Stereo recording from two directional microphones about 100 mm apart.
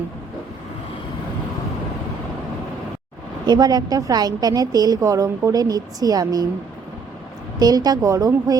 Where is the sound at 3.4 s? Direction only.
45° right (ahead or behind).